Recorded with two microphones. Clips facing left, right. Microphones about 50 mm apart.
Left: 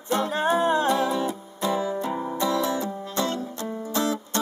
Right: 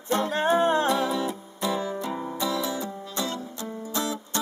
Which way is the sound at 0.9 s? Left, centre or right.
Centre.